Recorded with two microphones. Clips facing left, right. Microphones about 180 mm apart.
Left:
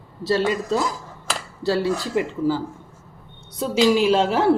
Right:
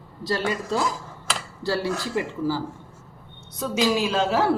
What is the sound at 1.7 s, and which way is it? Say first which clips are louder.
Speech: left 4 dB; 20° left (ahead or behind).